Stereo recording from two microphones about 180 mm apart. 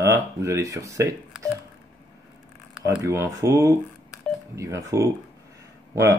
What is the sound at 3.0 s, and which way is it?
Speech, 15° right (ahead or behind).